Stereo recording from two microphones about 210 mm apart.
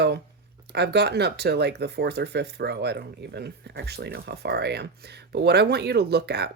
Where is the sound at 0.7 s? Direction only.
50° right (ahead or behind).